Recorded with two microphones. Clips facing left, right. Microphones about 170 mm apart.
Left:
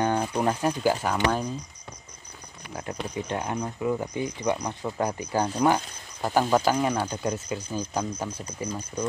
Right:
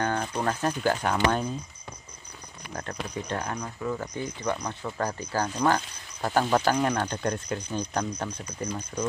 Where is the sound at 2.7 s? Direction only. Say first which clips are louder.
Left 1 dB; 5° left (ahead or behind).